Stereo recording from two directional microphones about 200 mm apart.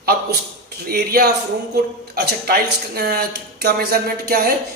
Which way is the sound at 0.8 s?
50° right (ahead or behind).